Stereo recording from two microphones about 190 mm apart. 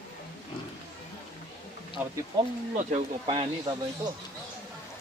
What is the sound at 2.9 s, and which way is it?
Speech, 30° right (ahead or behind).